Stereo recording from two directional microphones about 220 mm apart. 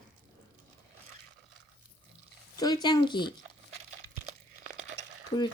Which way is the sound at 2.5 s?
15° left (ahead or behind).